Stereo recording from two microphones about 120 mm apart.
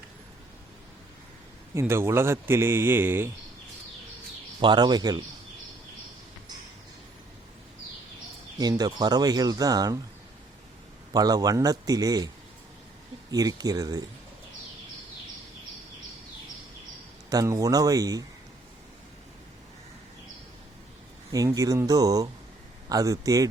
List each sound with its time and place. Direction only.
1.7 s a man's voice: 20° right (ahead or behind)
4.6 s speech: 40° right (ahead or behind)
8.8 s speech: 35° right (ahead or behind)
11.1 s speech: 30° right (ahead or behind)
13.3 s speech: 30° right (ahead or behind)
17.2 s a man's voice: 30° right (ahead or behind)
21.3 s a man's voice: 30° right (ahead or behind)